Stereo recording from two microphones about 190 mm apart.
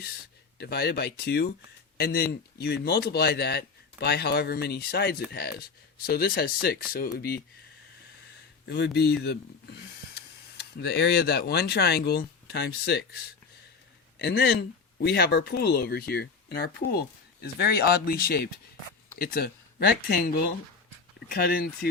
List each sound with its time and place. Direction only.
0.6 s speech: 60° left (ahead or behind)
8.6 s speech: 60° left (ahead or behind)
10.8 s speech: 60° left (ahead or behind)
14.2 s speech: 60° left (ahead or behind)